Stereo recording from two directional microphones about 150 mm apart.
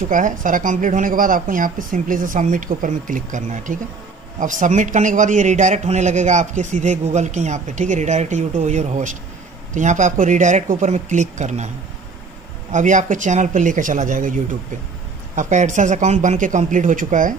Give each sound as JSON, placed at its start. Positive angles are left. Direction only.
{"t": 0.1, "sound": "a man's voice", "side_deg": -60}
{"t": 12.7, "sound": "speech", "side_deg": -55}